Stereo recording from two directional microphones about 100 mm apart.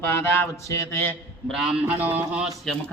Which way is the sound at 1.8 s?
20° right (ahead or behind).